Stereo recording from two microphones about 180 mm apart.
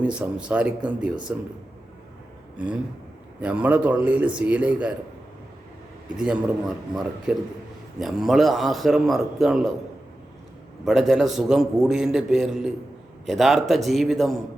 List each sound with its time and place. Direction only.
0.0 s speech: 5° right (ahead or behind)
3.4 s speech: 10° right (ahead or behind)
6.1 s a man's voice: 5° right (ahead or behind)
10.8 s a man's voice: centre (ahead or behind)